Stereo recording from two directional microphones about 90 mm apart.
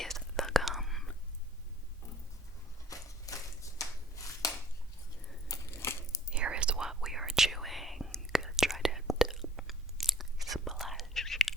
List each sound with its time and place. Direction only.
0.0 s whispering: 5° left (ahead or behind)
2.9 s a sound: 40° left (ahead or behind)
5.5 s crumpling: 35° left (ahead or behind)
6.3 s whispering: 10° right (ahead or behind)